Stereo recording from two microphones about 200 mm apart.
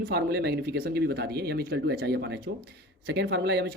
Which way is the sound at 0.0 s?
55° right (ahead or behind).